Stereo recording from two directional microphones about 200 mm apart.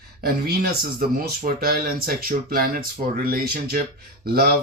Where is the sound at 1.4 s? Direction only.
45° right (ahead or behind).